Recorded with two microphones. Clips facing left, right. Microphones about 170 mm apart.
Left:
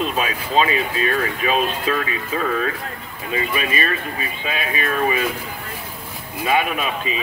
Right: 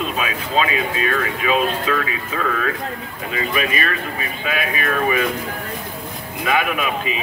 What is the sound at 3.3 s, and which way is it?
A man's voice, 30° left (ahead or behind).